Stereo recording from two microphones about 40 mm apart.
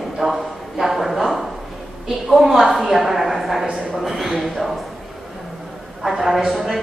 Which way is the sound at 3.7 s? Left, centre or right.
Centre.